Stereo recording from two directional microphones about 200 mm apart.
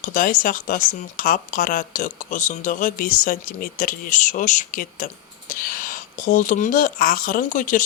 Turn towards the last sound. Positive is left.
turn(degrees=40)  # may be behind; listen again after turning